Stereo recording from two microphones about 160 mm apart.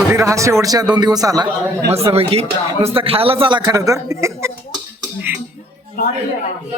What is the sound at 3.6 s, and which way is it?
Speech, 20° right (ahead or behind).